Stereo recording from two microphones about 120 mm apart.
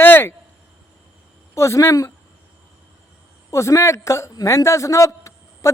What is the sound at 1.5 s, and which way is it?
Speech, 25° left (ahead or behind).